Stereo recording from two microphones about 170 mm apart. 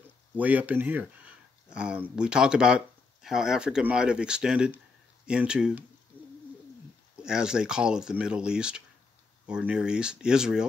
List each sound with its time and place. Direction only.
0.4 s speech: 10° right (ahead or behind)
6.1 s bird: 10° left (ahead or behind)
7.2 s speech: 5° right (ahead or behind)